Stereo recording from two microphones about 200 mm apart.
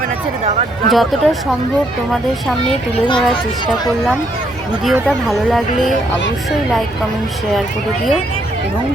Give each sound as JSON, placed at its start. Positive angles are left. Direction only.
{"t": 0.9, "sound": "speech", "side_deg": 0}
{"t": 2.9, "sound": "speech", "side_deg": 25}
{"t": 4.9, "sound": "speech", "side_deg": 0}